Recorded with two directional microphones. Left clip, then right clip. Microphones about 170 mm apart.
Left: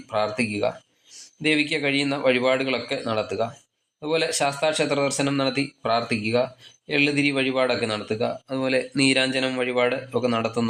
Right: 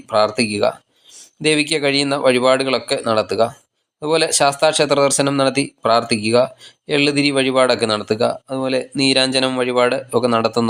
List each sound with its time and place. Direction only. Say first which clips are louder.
0.1 s speech: right 8 dB; 35° right (ahead or behind)
8.4 s speech: right 4 dB; 15° right (ahead or behind)
9.1 s speech: right 6 dB; 30° right (ahead or behind)